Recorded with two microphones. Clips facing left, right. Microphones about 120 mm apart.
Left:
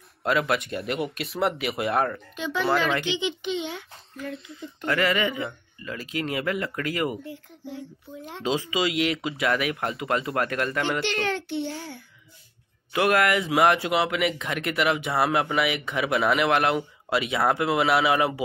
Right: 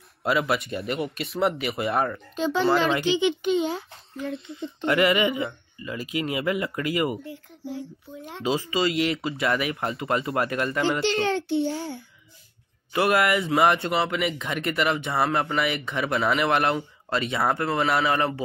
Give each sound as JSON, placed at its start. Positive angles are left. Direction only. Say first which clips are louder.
{"t": 0.2, "sound": "speech", "louder": "even", "side_deg": -5}
{"t": 2.3, "sound": "speech", "louder": "right 6 dB", "side_deg": -35}
{"t": 3.2, "sound": "a child's voice", "louder": "right 6 dB", "side_deg": -50}
{"t": 4.3, "sound": "speech", "louder": "right 5 dB", "side_deg": 0}
{"t": 4.8, "sound": "speech", "louder": "right 3 dB", "side_deg": -15}
{"t": 11.0, "sound": "a child's voice", "louder": "right 3 dB", "side_deg": -30}
{"t": 12.9, "sound": "speech", "louder": "even", "side_deg": 0}